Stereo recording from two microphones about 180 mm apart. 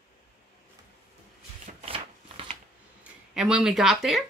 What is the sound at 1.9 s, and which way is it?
Shuffling cards, 30° right (ahead or behind).